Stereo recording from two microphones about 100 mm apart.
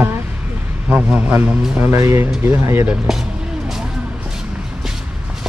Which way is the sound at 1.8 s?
25° right (ahead or behind).